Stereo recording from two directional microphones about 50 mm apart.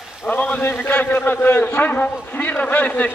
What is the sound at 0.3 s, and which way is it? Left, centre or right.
A man's voice, left.